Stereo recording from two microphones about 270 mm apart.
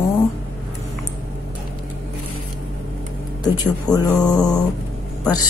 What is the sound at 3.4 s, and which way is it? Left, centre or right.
Speech, centre.